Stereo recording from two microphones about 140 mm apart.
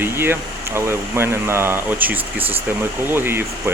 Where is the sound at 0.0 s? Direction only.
15° right (ahead or behind).